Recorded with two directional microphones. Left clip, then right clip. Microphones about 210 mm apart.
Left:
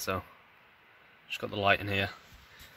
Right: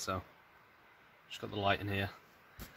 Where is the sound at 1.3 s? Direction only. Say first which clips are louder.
Left 7 dB; 40° left (ahead or behind).